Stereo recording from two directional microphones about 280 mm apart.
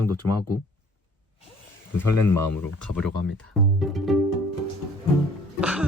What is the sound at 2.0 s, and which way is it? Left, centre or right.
Speech, centre.